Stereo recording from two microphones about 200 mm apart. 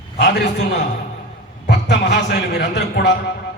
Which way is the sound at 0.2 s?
60° left (ahead or behind).